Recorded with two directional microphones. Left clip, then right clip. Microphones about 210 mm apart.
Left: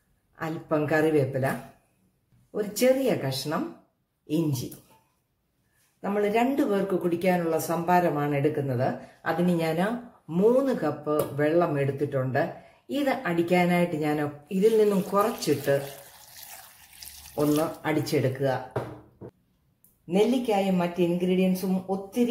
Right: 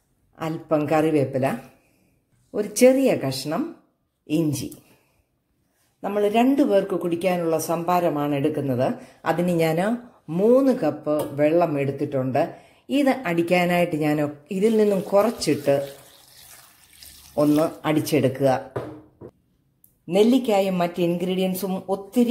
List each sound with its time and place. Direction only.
0.4 s speech: 25° right (ahead or behind)
2.5 s speech: 30° right (ahead or behind)
5.9 s speech: 30° right (ahead or behind)
17.8 s speech: 35° right (ahead or behind)
20.2 s speech: 40° right (ahead or behind)